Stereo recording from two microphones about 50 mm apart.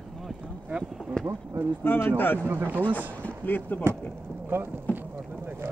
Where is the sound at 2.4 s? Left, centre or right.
Right.